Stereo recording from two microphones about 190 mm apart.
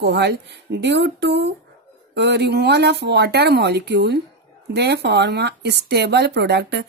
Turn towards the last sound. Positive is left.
turn(degrees=-60)  # may be behind; listen again after turning